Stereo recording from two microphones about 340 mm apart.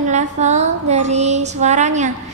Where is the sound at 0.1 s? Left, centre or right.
Right.